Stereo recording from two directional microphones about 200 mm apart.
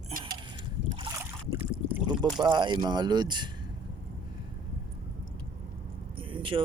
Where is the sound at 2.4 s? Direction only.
20° right (ahead or behind).